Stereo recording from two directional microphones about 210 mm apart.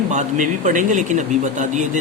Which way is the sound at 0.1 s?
35° right (ahead or behind).